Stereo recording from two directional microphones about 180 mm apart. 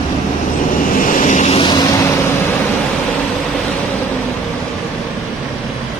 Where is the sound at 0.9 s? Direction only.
45° left (ahead or behind).